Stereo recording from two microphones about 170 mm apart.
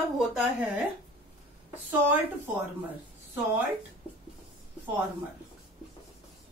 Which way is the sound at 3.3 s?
10° right (ahead or behind).